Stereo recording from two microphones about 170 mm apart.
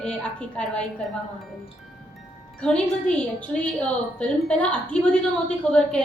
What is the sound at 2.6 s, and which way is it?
A woman's voice, 5° left (ahead or behind).